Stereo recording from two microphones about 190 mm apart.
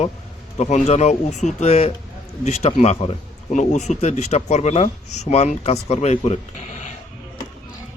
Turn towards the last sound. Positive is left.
turn(degrees=35)  # may be behind; listen again after turning